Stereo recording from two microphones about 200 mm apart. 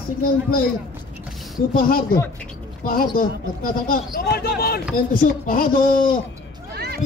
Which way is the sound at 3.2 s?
45° left (ahead or behind).